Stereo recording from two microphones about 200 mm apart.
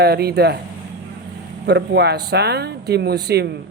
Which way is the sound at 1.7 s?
55° right (ahead or behind).